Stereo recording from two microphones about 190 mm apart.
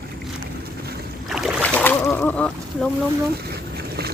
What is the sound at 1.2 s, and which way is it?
Boat, centre (ahead or behind).